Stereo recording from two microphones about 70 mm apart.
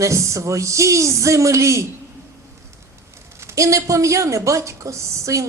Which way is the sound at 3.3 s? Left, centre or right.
Right.